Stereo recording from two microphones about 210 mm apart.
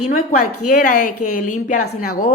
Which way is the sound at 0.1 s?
35° left (ahead or behind).